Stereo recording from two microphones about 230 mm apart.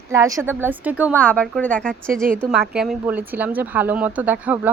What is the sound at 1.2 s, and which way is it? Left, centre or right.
A woman's voice, centre.